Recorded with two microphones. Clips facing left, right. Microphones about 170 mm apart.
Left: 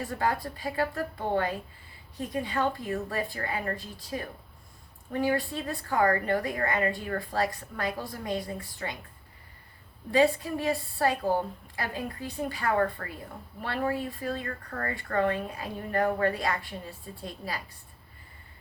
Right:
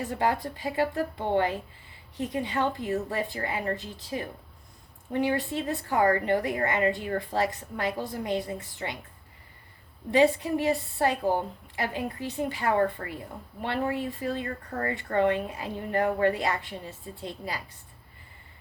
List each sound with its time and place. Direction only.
0.0 s a woman's voice: 20° right (ahead or behind)
10.1 s a woman's voice: 20° right (ahead or behind)